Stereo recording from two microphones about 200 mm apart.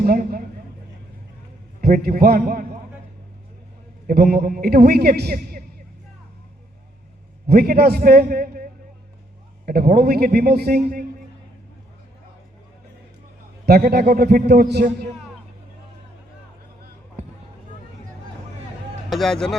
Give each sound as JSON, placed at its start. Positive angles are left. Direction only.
{"t": 0.0, "sound": "a man's voice", "side_deg": -45}
{"t": 1.8, "sound": "a man's voice", "side_deg": -50}
{"t": 4.0, "sound": "a man's voice", "side_deg": -50}
{"t": 7.4, "sound": "a man's voice", "side_deg": -50}
{"t": 13.7, "sound": "a man's voice", "side_deg": -55}
{"t": 19.1, "sound": "speech", "side_deg": 0}